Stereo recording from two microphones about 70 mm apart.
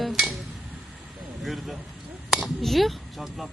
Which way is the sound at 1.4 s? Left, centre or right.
Centre.